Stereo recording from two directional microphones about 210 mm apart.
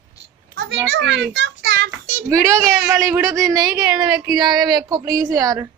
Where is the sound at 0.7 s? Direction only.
55° right (ahead or behind).